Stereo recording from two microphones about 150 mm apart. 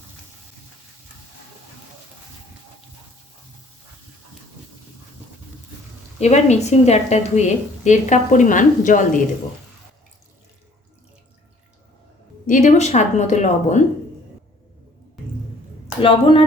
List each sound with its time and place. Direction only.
6.1 s a woman's voice: 50° left (ahead or behind)
12.5 s a woman's voice: 55° left (ahead or behind)
16.0 s speech: 35° left (ahead or behind)